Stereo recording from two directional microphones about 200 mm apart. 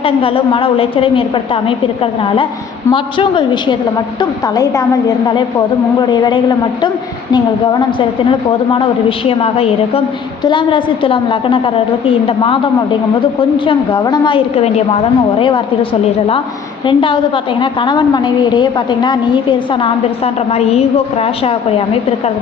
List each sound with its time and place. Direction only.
0.0 s a woman's voice: 25° left (ahead or behind)